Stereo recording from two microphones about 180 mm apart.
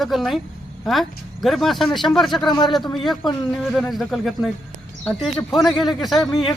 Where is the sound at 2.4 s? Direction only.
25° left (ahead or behind).